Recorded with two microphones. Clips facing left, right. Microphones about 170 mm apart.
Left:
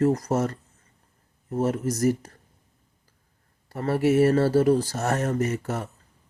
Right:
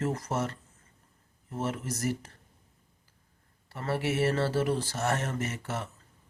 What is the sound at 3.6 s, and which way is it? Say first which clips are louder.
Speech: left 8 dB; 40° left (ahead or behind).